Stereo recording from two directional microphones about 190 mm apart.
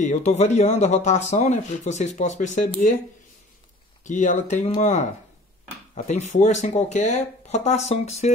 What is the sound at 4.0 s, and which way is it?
Speech, 40° left (ahead or behind).